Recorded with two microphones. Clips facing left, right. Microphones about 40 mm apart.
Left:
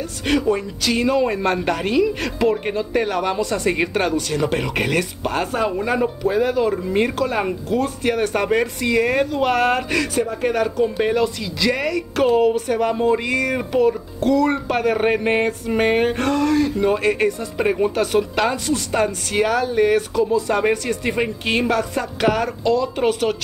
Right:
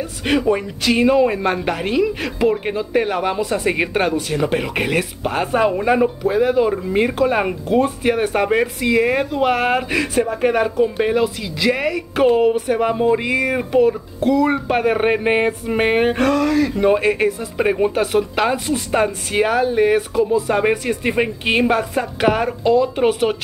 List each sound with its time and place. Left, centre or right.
0.4 s a man's voice: right; by 5.5 s centre
5.5 s speech: right
6.0 s a man's voice: centre
7.4 s speech: right
8.0 s a man's voice: centre
10.1 s speech: right
10.8 s a man's voice: centre
16.7 s speech: centre
17.1 s a man's voice: centre